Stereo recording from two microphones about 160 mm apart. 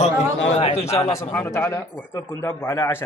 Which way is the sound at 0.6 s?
40° left (ahead or behind).